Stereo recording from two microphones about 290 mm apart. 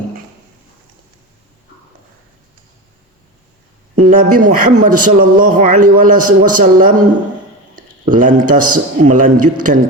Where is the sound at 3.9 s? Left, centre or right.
Right.